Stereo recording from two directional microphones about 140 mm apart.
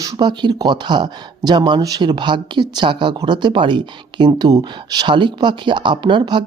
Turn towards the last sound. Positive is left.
turn(degrees=-35)  # may be behind; listen again after turning